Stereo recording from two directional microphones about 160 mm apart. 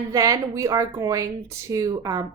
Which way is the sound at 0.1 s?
20° right (ahead or behind).